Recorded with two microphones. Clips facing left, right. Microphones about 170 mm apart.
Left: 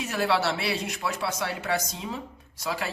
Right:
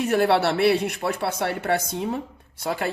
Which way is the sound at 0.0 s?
55° right (ahead or behind).